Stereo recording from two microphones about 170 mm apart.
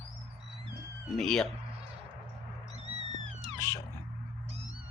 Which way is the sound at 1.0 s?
5° left (ahead or behind).